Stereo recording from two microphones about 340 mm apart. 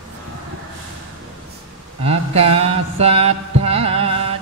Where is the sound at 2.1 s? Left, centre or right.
Centre.